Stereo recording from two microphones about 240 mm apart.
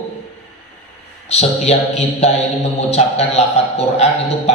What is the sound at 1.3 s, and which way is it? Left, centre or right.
A man's voice, left.